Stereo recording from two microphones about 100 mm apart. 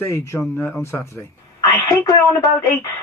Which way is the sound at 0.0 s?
25° left (ahead or behind).